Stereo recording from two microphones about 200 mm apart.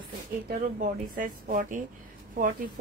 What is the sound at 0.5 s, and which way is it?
Speech, 40° right (ahead or behind).